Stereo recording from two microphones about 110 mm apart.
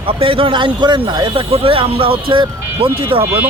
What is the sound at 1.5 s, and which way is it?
A man's voice, 55° right (ahead or behind).